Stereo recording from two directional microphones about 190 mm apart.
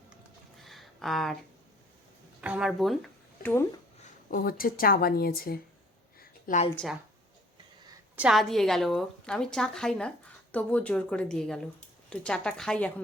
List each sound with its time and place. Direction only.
0.6 s a sound: centre (ahead or behind)
2.4 s a woman's voice: 5° right (ahead or behind)
3.4 s speech: 15° left (ahead or behind)
4.0 s speech: 50° left (ahead or behind)
6.1 s a sound: 40° left (ahead or behind)
8.1 s a woman's voice: 5° right (ahead or behind)